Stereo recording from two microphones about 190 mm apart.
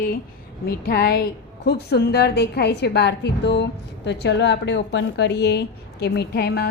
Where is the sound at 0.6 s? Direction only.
55° left (ahead or behind).